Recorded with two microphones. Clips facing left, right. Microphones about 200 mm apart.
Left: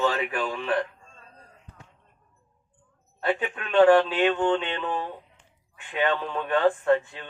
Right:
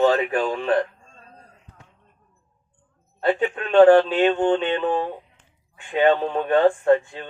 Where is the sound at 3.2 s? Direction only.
30° right (ahead or behind).